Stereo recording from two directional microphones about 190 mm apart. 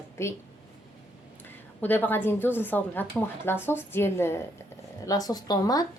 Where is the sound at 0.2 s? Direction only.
15° left (ahead or behind).